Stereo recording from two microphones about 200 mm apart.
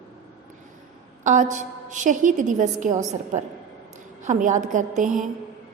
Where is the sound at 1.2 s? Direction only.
40° right (ahead or behind).